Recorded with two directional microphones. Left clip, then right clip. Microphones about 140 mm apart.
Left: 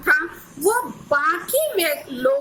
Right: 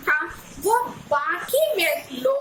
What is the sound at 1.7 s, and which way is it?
Speech, 40° left (ahead or behind).